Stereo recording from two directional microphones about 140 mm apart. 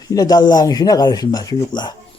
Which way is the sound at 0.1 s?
25° left (ahead or behind).